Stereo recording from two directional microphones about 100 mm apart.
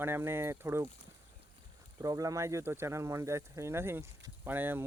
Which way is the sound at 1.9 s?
35° right (ahead or behind).